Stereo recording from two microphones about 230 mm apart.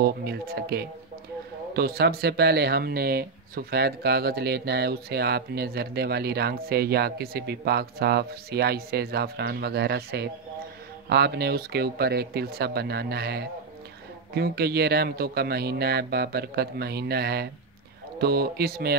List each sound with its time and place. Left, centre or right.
0.0 s speech: right